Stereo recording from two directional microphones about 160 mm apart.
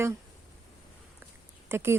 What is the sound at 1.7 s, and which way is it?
Speech, 15° right (ahead or behind).